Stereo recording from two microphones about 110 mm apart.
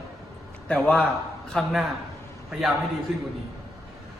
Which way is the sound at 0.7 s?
10° left (ahead or behind).